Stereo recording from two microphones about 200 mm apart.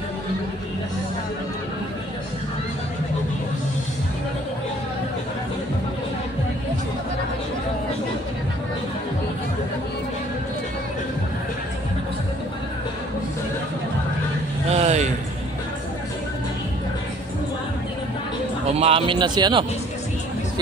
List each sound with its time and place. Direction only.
14.7 s vehicle: 30° right (ahead or behind)
18.8 s a man's voice: 30° right (ahead or behind)